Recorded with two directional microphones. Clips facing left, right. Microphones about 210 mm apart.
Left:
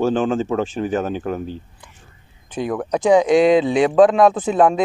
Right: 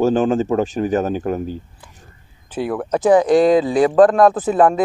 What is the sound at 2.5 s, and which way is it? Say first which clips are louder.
Speech: right 1 dB; 5° right (ahead or behind).